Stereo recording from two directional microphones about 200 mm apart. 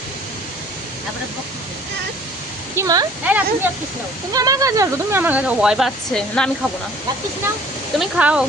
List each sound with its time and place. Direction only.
2.7 s speech: 20° right (ahead or behind); by 6.5 s 5° left (ahead or behind)
7.9 s speech: 5° right (ahead or behind)